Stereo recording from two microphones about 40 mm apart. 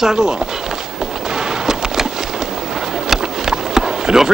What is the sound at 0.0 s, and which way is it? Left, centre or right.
Speech, centre.